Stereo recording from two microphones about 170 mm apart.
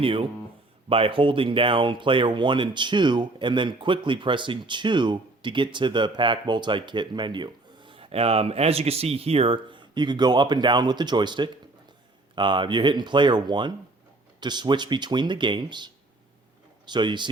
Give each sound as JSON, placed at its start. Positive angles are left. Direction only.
{"t": 0.0, "sound": "speech", "side_deg": -30}